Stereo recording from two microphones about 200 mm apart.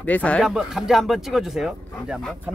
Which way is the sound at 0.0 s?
5° left (ahead or behind).